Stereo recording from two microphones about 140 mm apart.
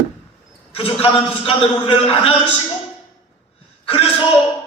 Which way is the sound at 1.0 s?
40° left (ahead or behind).